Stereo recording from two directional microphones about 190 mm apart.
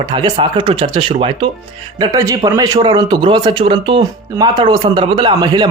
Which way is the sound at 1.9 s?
20° right (ahead or behind).